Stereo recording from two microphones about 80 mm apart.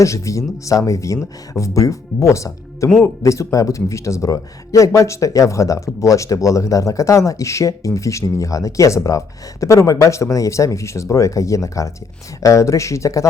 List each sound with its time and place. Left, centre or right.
0.0 s speech: left